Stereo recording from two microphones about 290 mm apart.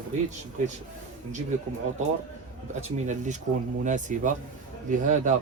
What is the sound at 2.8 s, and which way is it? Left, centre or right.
Speech, right.